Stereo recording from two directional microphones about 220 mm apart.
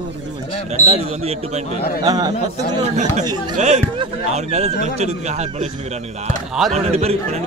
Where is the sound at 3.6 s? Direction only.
30° right (ahead or behind).